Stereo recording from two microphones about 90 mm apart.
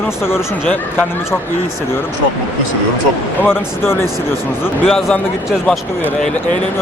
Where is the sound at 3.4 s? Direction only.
25° left (ahead or behind).